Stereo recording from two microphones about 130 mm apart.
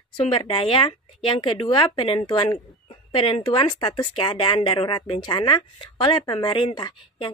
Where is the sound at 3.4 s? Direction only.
35° left (ahead or behind).